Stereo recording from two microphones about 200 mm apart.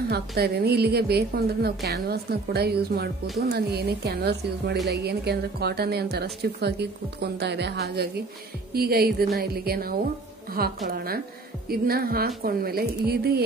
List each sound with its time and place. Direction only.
0.1 s a woman's voice: 50° right (ahead or behind)